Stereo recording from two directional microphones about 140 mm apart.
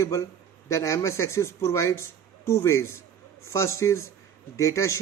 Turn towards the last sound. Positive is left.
turn(degrees=20)  # may be behind; listen again after turning